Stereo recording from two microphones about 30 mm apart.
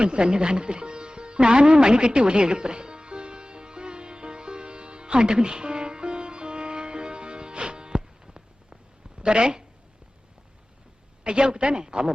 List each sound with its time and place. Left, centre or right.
0.0 s sitar: right
7.5 s music: right
11.2 s speech: right